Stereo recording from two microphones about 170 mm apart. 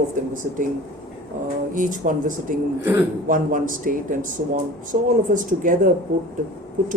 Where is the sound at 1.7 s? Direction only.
50° right (ahead or behind).